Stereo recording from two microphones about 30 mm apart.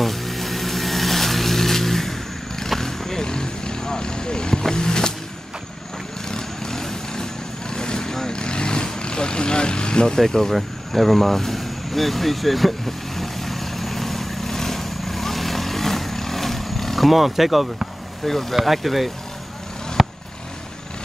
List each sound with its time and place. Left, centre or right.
0.0 s vehicle: centre; by 5.1 s left
6.2 s vehicle: left
10.1 s speech: centre
10.5 s vehicle: centre
18.2 s speech: centre
20.0 s vehicle: centre